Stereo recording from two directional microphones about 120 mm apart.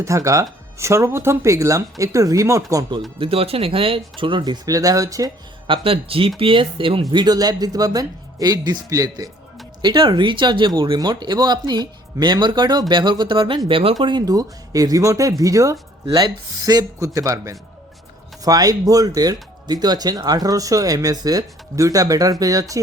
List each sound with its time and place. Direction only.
0.0 s speech: 25° right (ahead or behind)
3.2 s speech: 50° right (ahead or behind); by 5.3 s 30° right (ahead or behind)
5.6 s speech: 45° right (ahead or behind); by 22.8 s 30° right (ahead or behind)